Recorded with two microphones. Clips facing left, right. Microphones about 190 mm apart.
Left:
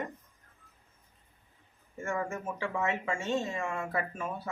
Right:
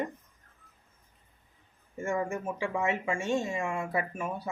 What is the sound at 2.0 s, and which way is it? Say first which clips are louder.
Speech: right 3 dB; 15° right (ahead or behind).